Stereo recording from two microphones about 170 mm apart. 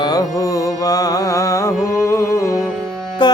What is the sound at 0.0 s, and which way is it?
Music, 20° left (ahead or behind).